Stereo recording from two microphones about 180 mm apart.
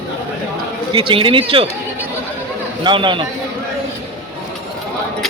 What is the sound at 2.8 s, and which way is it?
Speech, 25° right (ahead or behind).